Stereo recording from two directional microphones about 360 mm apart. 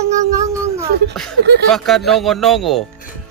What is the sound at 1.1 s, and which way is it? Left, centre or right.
Speech, centre.